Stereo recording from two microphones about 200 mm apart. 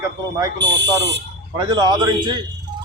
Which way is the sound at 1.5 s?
20° right (ahead or behind).